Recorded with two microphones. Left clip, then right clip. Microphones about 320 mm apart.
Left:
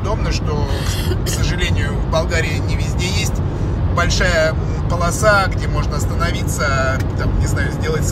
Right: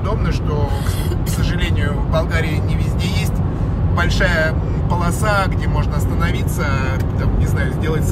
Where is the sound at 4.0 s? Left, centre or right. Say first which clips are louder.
Left 2 dB; centre.